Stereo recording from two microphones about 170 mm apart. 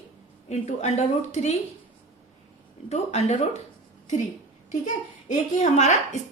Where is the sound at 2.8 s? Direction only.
40° left (ahead or behind).